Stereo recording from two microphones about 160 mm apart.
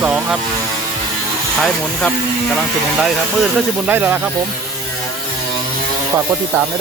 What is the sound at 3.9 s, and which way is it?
Speech, 15° right (ahead or behind).